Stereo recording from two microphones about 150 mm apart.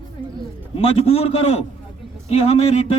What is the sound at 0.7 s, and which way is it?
A man's voice, 40° left (ahead or behind).